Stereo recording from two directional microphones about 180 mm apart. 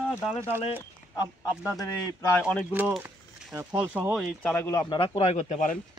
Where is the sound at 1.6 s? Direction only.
15° left (ahead or behind).